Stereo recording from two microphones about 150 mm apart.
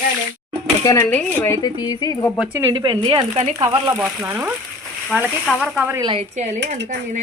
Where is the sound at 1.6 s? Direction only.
25° left (ahead or behind).